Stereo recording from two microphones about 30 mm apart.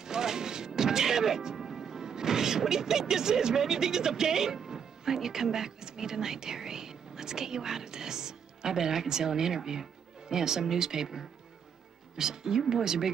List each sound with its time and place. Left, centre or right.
0.0 s music: centre
1.7 s speech: centre